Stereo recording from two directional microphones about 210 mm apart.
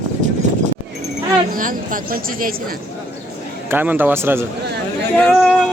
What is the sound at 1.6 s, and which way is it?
Speech, 40° right (ahead or behind).